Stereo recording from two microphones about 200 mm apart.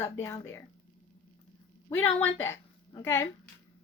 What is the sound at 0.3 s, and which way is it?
Speech, 15° left (ahead or behind).